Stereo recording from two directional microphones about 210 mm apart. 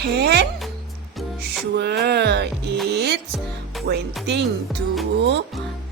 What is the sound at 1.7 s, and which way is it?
Music, 50° right (ahead or behind).